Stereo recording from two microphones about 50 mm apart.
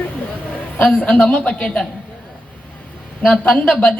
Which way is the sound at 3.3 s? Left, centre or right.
Centre.